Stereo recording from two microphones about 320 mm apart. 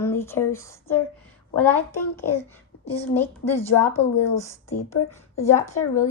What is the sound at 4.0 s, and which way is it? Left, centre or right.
Speech, centre.